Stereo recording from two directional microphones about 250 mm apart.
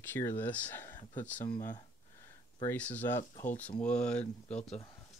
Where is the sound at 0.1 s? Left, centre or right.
Centre.